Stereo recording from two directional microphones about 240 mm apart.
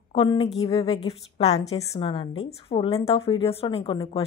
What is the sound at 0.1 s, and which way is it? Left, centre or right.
A woman's voice, left.